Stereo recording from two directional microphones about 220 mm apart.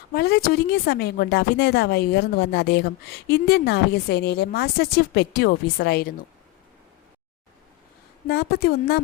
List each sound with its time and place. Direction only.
0.1 s speech: 45° left (ahead or behind)
8.3 s speech: 45° left (ahead or behind)